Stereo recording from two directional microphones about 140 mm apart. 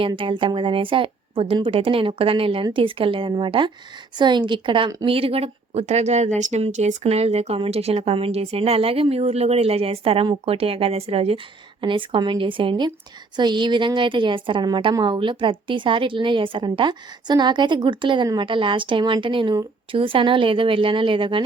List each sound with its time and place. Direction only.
0.1 s a woman's voice: 35° right (ahead or behind)